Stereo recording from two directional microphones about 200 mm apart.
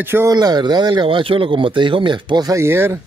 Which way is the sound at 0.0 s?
15° right (ahead or behind).